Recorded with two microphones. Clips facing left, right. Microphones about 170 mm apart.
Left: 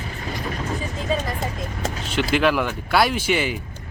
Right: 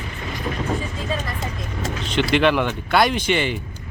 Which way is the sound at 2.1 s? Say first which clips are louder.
Right 2 dB; 5° left (ahead or behind).